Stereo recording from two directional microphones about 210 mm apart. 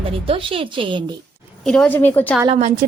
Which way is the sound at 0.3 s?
25° right (ahead or behind).